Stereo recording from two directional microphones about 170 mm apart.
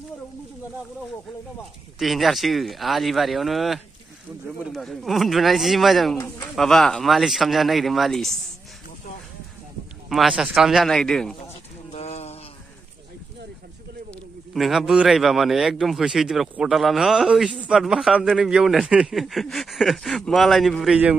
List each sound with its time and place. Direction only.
2.0 s speech: centre (ahead or behind)
6.1 s speech: 15° left (ahead or behind)
6.5 s speech: centre (ahead or behind)
10.0 s speech: 5° right (ahead or behind)
11.9 s a sound: 40° left (ahead or behind)
14.5 s speech: centre (ahead or behind)